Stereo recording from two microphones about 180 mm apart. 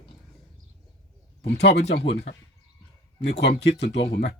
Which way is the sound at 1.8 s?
75° left (ahead or behind).